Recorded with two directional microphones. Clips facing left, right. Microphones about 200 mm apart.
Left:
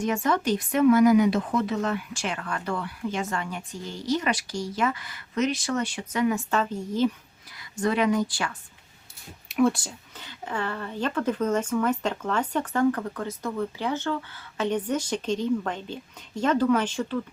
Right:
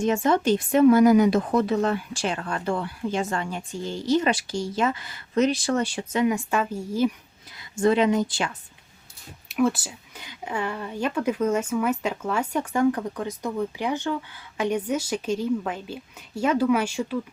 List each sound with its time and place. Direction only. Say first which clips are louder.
0.0 s speech: right 4 dB; 25° right (ahead or behind)
6.2 s a woman's voice: even; 15° right (ahead or behind)
7.5 s speech: right 5 dB; 25° right (ahead or behind)
9.5 s a woman's voice: even; centre (ahead or behind)